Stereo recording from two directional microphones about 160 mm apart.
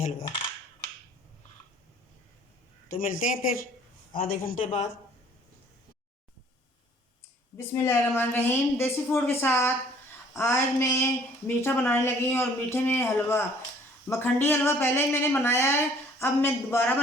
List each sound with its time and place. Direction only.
0.0 s a sound: 50° left (ahead or behind)
3.0 s speech: 55° left (ahead or behind)
7.5 s speech: 15° left (ahead or behind)